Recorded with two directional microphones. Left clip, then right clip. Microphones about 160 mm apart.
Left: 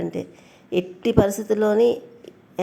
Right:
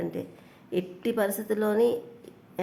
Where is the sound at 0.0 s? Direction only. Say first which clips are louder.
Left 5 dB; 20° left (ahead or behind).